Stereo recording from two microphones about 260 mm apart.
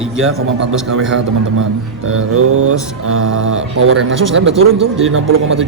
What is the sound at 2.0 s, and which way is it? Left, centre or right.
Mantra, right.